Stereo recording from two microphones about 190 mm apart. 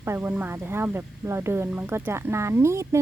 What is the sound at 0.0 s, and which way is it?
Speech, 10° right (ahead or behind).